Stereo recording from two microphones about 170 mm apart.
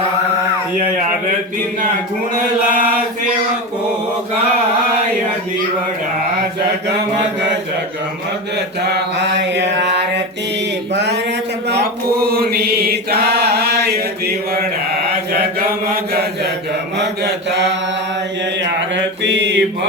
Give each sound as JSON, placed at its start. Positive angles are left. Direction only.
{"t": 8.8, "sound": "mantra", "side_deg": -90}
{"t": 10.9, "sound": "a sound", "side_deg": -90}
{"t": 11.7, "sound": "mantra", "side_deg": -65}
{"t": 17.0, "sound": "mantra", "side_deg": -85}
{"t": 18.9, "sound": "mantra", "side_deg": -90}